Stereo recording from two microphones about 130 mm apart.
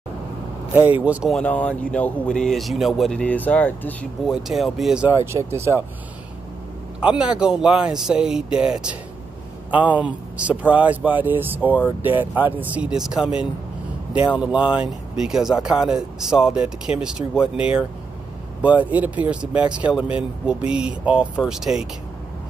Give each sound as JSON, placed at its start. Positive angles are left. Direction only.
{"t": 0.7, "sound": "speech", "side_deg": -15}
{"t": 1.3, "sound": "speech", "side_deg": 10}
{"t": 4.3, "sound": "speech", "side_deg": 0}
{"t": 5.0, "sound": "speech", "side_deg": -20}
{"t": 7.0, "sound": "speech", "side_deg": -10}